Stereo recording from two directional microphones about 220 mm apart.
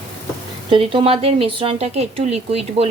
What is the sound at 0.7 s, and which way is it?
Speech, 25° right (ahead or behind).